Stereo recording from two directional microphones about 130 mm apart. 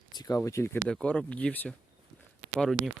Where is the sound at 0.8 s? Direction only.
10° left (ahead or behind).